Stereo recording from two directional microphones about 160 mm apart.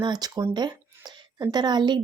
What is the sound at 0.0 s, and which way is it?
Speech, 25° right (ahead or behind).